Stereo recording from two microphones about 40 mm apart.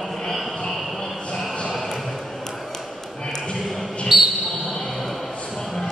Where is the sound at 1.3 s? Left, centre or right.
Left.